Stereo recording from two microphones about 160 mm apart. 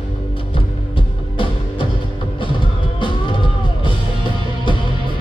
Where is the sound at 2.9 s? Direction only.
30° left (ahead or behind).